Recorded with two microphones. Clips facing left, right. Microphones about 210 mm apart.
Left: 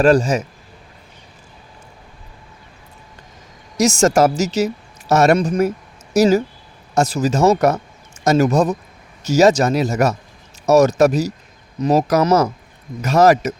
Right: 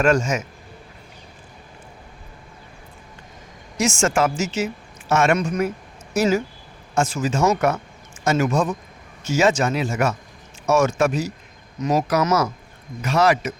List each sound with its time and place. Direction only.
0.0 s a woman's voice: 35° left (ahead or behind)
3.8 s a woman's voice: 40° left (ahead or behind)